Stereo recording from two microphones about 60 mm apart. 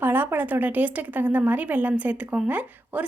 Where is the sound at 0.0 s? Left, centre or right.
Right.